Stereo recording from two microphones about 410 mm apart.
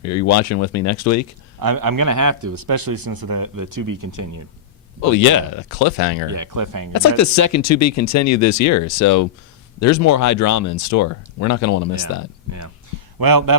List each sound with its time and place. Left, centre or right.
0.0 s speech: left
1.5 s speech: right
4.9 s speech: left
6.3 s speech: right
6.9 s speech: left
13.1 s speech: right